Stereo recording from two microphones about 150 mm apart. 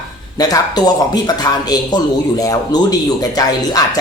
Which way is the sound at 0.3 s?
25° left (ahead or behind).